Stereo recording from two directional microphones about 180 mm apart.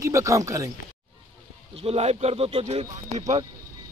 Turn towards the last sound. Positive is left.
turn(degrees=-40)  # may be behind; listen again after turning